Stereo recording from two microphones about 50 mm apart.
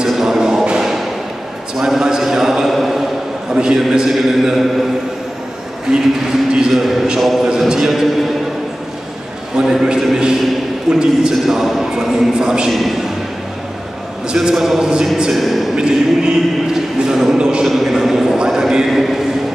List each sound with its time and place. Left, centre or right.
0.1 s a sound: centre
0.7 s music: centre
1.8 s a man's voice: centre
3.5 s speech: centre
5.9 s a man's voice: centre
9.6 s speech: centre
14.3 s speech: centre
15.3 s a man's voice: centre
15.7 s speech: centre
17.6 s speech: centre
18.9 s a man's voice: centre